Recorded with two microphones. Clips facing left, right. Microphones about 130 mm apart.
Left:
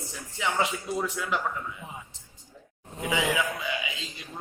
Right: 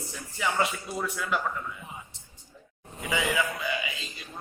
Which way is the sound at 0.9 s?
15° left (ahead or behind).